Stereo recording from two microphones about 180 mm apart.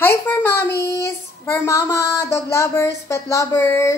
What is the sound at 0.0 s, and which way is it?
A woman's voice, 10° left (ahead or behind).